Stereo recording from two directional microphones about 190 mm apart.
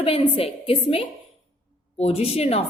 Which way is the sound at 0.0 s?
30° left (ahead or behind).